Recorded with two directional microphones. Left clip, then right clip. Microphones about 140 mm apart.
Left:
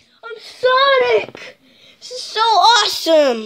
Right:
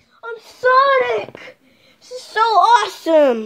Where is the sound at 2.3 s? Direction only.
10° right (ahead or behind); by 3.2 s 5° left (ahead or behind).